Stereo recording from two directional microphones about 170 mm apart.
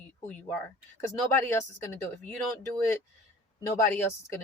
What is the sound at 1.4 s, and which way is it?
Speech, 15° left (ahead or behind).